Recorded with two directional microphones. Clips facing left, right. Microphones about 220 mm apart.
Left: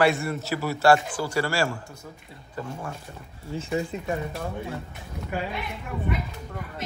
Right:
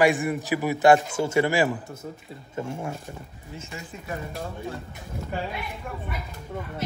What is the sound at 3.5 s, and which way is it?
Speech, 30° left (ahead or behind).